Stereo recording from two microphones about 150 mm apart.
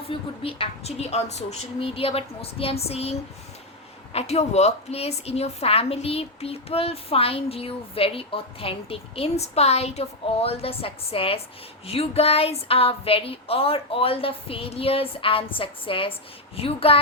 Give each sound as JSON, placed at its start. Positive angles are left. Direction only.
{"t": 0.1, "sound": "a woman's voice", "side_deg": 40}